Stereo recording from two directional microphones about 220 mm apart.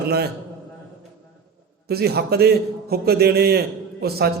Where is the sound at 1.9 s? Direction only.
45° right (ahead or behind).